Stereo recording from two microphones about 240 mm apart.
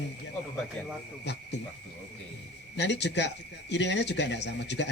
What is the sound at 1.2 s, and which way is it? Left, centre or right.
Speech, left.